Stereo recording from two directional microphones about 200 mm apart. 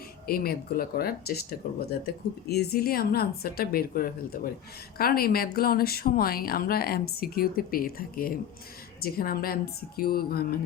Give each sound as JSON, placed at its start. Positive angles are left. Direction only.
{"t": 0.3, "sound": "speech", "side_deg": 50}